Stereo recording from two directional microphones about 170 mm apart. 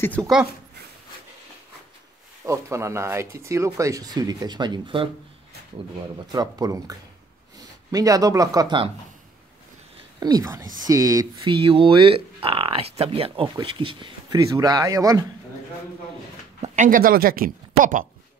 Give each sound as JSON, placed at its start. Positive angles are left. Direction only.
{"t": 0.2, "sound": "speech", "side_deg": 0}
{"t": 2.4, "sound": "speech", "side_deg": -15}
{"t": 6.1, "sound": "speech", "side_deg": -20}
{"t": 9.9, "sound": "speech", "side_deg": -25}
{"t": 11.5, "sound": "speech", "side_deg": -30}
{"t": 16.6, "sound": "speech", "side_deg": -45}